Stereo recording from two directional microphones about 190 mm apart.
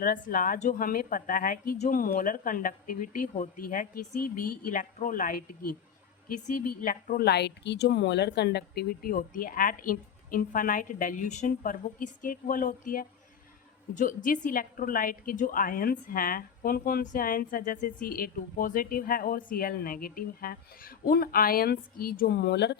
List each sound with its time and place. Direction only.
0.0 s a woman's voice: 45° left (ahead or behind); by 22.8 s 60° left (ahead or behind)